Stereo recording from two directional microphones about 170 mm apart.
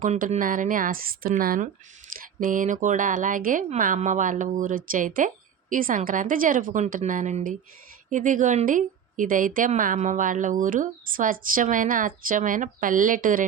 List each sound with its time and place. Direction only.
0.0 s speech: 50° right (ahead or behind)